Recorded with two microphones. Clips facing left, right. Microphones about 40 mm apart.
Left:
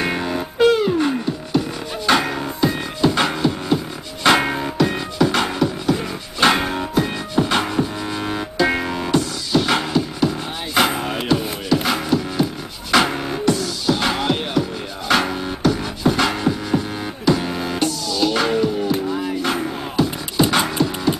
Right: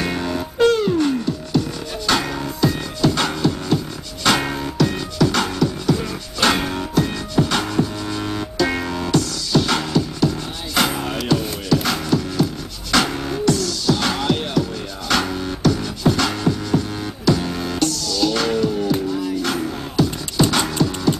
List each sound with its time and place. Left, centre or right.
0.0 s music: centre
12.9 s beatboxing: centre
19.1 s music: left